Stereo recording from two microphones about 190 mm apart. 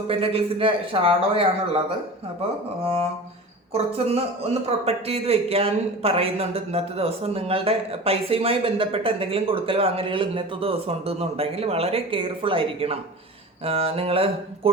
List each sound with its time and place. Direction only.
0.1 s a man's voice: 30° right (ahead or behind)
2.8 s a man's voice: 30° right (ahead or behind)